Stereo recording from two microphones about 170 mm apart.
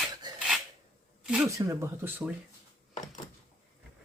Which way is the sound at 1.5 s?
15° right (ahead or behind).